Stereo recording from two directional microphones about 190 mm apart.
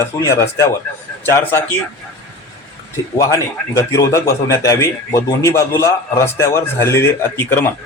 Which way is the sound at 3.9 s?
15° left (ahead or behind).